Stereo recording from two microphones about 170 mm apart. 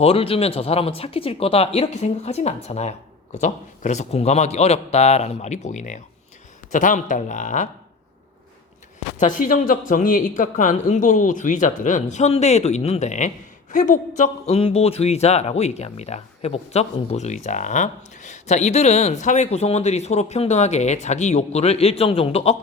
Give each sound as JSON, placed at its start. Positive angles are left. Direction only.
{"t": 0.0, "sound": "speech", "side_deg": 35}
{"t": 9.1, "sound": "speech", "side_deg": 50}